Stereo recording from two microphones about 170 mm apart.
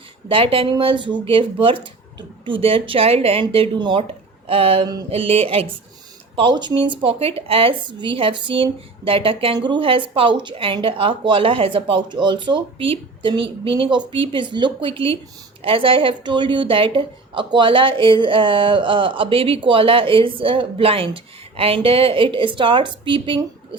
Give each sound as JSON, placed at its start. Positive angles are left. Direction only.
{"t": 0.3, "sound": "a woman's voice", "side_deg": -30}